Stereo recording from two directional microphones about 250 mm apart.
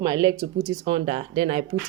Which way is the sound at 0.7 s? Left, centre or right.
Right.